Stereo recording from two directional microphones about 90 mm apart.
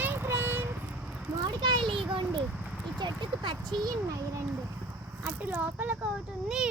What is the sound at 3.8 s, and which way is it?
Speech, 40° right (ahead or behind).